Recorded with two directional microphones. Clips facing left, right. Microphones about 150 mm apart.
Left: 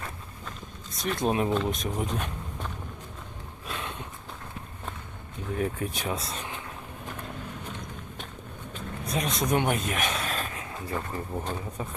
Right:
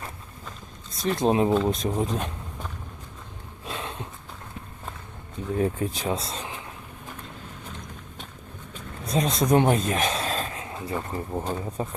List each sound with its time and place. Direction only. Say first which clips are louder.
1.0 s speech: right 5 dB; 30° right (ahead or behind)
3.7 s snort: right 2 dB; 30° right (ahead or behind)
5.5 s speech: right 4 dB; 30° right (ahead or behind)
9.0 s speech: right 5 dB; 30° right (ahead or behind)
11.8 s speech: right 5 dB; 30° right (ahead or behind)